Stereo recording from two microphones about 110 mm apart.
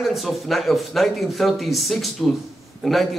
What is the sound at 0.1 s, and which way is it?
A man's voice, centre (ahead or behind).